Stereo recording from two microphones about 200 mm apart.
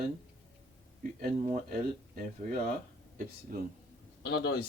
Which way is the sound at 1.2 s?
40° right (ahead or behind).